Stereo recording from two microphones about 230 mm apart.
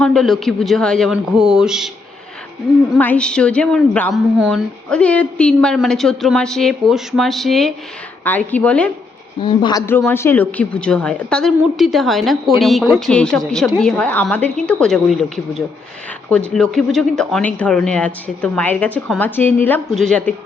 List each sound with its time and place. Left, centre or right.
0.0 s a woman's voice: centre
3.0 s a woman's voice: centre
9.4 s a woman's voice: left; by 20.3 s centre